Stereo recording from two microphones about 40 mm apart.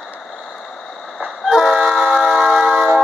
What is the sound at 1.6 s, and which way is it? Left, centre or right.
Vehicle, centre.